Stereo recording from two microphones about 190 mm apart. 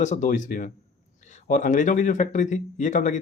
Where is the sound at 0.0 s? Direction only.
40° left (ahead or behind).